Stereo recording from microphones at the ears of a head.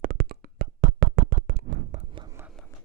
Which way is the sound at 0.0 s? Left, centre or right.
Right.